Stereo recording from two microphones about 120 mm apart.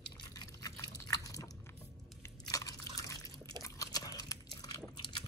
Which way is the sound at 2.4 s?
30° left (ahead or behind).